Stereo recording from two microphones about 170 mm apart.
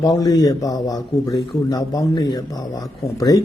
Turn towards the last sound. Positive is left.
turn(degrees=20)  # may be behind; listen again after turning